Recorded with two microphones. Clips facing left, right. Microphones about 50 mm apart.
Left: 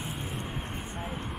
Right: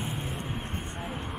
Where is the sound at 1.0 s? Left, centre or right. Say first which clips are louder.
Even; centre.